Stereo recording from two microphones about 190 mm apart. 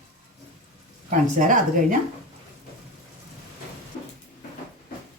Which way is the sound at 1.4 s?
40° right (ahead or behind).